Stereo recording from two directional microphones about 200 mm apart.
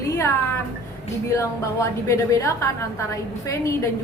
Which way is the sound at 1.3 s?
15° left (ahead or behind).